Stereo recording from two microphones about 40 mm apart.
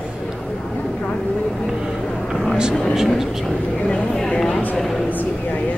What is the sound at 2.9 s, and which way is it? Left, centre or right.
Speech, centre.